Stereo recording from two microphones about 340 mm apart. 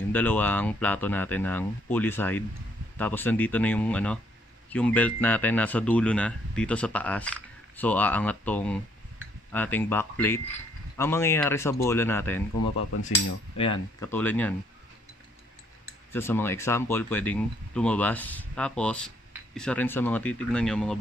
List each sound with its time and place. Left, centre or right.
0.1 s speech: centre
12.7 s cutlery: left
13.6 s speech: centre
16.1 s speech: centre